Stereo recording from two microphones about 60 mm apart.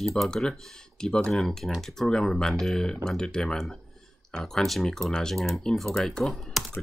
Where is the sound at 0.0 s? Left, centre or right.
Centre.